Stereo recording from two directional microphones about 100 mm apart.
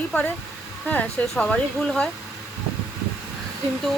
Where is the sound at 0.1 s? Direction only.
15° left (ahead or behind).